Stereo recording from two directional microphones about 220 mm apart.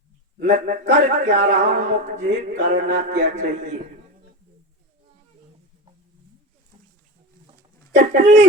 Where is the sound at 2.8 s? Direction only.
45° right (ahead or behind).